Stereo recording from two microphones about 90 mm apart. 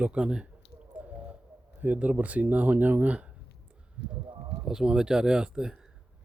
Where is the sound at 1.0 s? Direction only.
15° right (ahead or behind).